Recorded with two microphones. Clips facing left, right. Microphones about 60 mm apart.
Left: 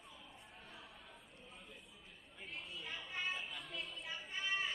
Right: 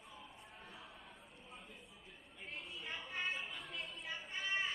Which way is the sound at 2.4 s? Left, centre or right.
Right.